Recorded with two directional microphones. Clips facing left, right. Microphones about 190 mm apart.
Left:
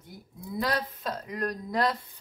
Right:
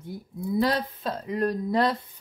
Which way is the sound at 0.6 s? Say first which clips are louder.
Right 3 dB; 25° right (ahead or behind).